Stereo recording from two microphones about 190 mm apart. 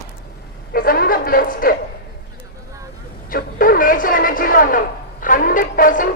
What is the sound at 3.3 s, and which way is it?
A woman's voice, 50° left (ahead or behind).